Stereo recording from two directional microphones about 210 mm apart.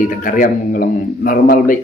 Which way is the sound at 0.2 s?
40° left (ahead or behind).